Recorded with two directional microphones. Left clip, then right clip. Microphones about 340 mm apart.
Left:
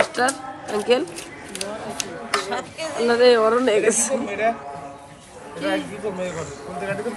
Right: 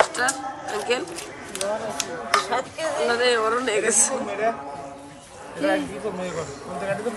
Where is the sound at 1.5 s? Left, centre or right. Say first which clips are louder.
Right 3 dB; centre.